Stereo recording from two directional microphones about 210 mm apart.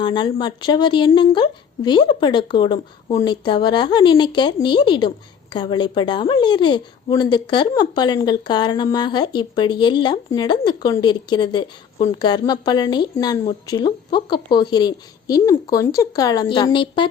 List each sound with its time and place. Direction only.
0.0 s speech: 20° left (ahead or behind)